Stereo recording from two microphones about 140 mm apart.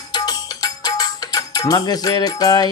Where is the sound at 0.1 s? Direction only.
30° left (ahead or behind).